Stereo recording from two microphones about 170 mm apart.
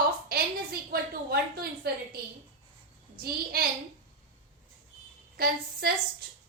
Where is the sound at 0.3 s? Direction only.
65° right (ahead or behind).